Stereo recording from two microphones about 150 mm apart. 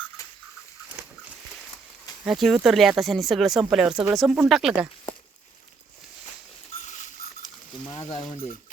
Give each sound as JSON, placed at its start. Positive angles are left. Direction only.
{"t": 0.2, "sound": "a sound", "side_deg": 25}
{"t": 2.2, "sound": "speech", "side_deg": 0}
{"t": 6.8, "sound": "patter", "side_deg": 55}
{"t": 8.1, "sound": "speech", "side_deg": 30}